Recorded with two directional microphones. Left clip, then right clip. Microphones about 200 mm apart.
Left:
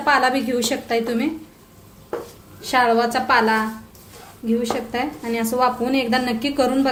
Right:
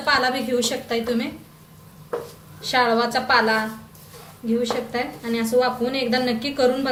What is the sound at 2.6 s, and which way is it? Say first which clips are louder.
Speech: left 2 dB; 50° left (ahead or behind).